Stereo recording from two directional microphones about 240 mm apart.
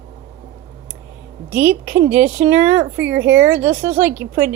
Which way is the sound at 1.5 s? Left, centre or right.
Centre.